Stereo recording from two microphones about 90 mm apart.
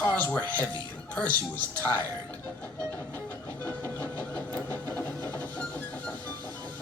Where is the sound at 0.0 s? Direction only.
15° left (ahead or behind).